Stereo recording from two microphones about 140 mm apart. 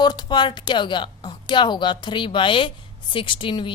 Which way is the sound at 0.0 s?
30° left (ahead or behind).